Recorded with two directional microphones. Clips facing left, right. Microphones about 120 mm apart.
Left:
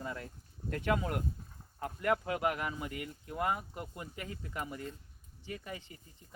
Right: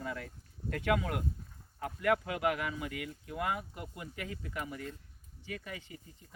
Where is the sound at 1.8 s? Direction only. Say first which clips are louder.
Right 1 dB; 35° left (ahead or behind).